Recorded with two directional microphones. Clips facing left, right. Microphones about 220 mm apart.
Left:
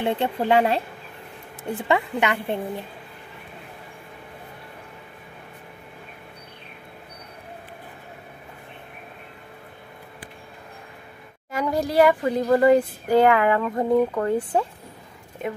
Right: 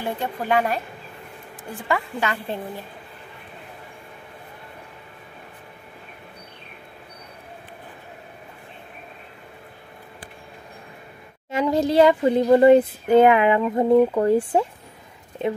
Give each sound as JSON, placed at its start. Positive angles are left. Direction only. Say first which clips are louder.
{"t": 0.0, "sound": "a woman's voice", "louder": "left 4 dB", "side_deg": 25}
{"t": 11.5, "sound": "speech", "louder": "right 3 dB", "side_deg": -25}